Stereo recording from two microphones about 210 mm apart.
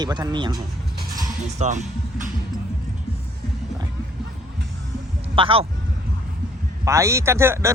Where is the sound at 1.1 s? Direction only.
35° right (ahead or behind).